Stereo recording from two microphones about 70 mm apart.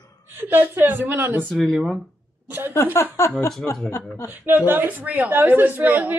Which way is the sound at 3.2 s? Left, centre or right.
Left.